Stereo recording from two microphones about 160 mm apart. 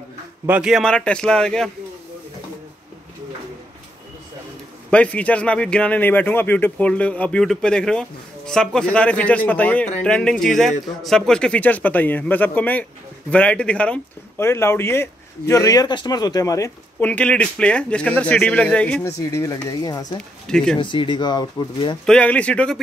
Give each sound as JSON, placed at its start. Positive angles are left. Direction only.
{"t": 0.5, "sound": "a man's voice", "side_deg": -5}
{"t": 4.9, "sound": "speech", "side_deg": 10}
{"t": 17.0, "sound": "speech", "side_deg": 10}
{"t": 19.0, "sound": "speech", "side_deg": 20}
{"t": 20.2, "sound": "speech", "side_deg": 5}
{"t": 20.8, "sound": "speech", "side_deg": 30}
{"t": 22.0, "sound": "speech", "side_deg": 5}